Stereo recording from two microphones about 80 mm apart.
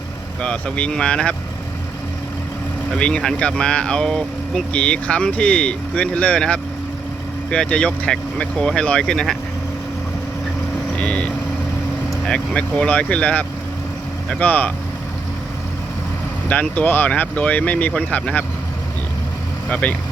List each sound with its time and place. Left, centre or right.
0.4 s speech: centre
2.9 s speech: centre
10.9 s speech: centre
16.5 s speech: centre
19.7 s speech: centre